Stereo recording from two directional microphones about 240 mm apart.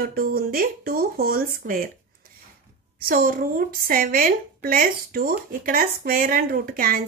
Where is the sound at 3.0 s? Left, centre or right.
Right.